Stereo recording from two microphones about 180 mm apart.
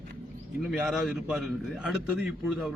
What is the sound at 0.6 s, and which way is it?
A man's voice, 5° right (ahead or behind).